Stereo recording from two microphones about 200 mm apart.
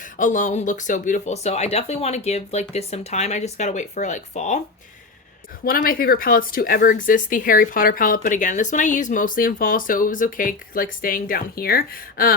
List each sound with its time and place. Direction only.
0.0 s speech: 40° left (ahead or behind)
5.6 s speech: 45° left (ahead or behind)